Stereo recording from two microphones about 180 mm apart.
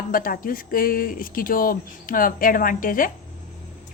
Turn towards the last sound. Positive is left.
turn(degrees=50)  # may be behind; listen again after turning